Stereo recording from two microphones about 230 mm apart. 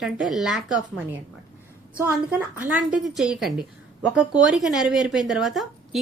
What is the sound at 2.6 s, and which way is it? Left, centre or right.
Speech, centre.